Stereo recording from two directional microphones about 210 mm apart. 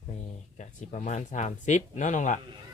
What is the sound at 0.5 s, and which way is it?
Speech, 35° left (ahead or behind).